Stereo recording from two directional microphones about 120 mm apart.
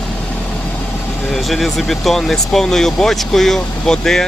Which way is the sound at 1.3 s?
Centre (ahead or behind).